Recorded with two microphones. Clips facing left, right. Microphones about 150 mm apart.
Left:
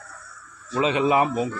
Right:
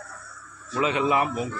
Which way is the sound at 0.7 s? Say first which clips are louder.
Left 3 dB; 25° left (ahead or behind).